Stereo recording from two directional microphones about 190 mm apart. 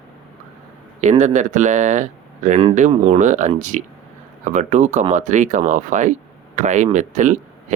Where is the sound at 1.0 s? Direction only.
40° right (ahead or behind).